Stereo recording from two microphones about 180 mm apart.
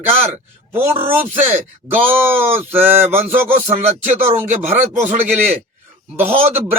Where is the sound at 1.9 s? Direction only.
10° right (ahead or behind).